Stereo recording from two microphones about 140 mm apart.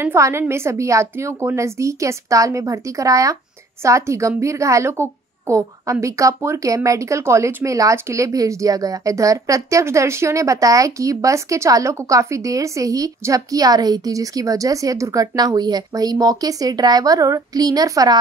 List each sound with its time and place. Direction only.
0.0 s a woman's voice: 20° right (ahead or behind)